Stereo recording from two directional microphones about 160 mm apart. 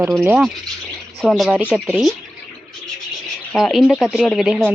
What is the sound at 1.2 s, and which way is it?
Speech, centre (ahead or behind).